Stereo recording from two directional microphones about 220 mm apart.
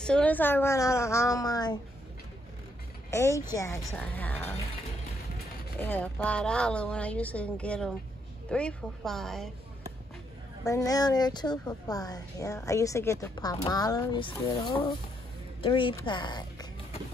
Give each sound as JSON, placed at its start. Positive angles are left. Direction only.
{"t": 0.0, "sound": "a woman's voice", "side_deg": 5}
{"t": 3.1, "sound": "a woman's voice", "side_deg": 15}
{"t": 5.8, "sound": "speech", "side_deg": 10}
{"t": 10.6, "sound": "a woman's voice", "side_deg": 15}